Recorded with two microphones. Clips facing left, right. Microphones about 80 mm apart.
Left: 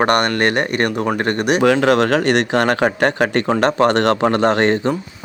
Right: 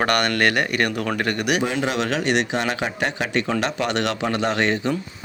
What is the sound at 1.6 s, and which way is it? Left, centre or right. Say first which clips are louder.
Speech: left 9 dB; left.